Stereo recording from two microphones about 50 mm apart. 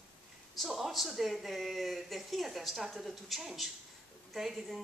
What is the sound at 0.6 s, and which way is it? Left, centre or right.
Speech, centre.